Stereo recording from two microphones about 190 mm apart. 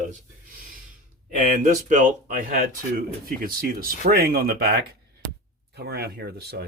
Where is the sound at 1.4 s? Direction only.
40° right (ahead or behind); by 6.7 s 55° right (ahead or behind).